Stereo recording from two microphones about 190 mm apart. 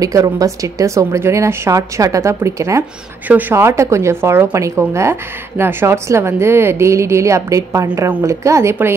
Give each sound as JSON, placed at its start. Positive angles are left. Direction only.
{"t": 0.0, "sound": "a woman's voice", "side_deg": -15}